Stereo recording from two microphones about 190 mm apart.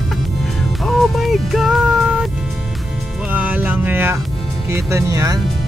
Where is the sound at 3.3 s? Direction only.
10° right (ahead or behind).